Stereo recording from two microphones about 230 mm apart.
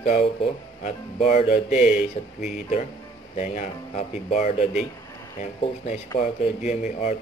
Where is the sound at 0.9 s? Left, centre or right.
Left.